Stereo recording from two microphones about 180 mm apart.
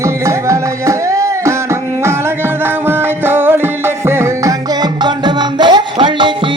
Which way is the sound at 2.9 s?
10° right (ahead or behind).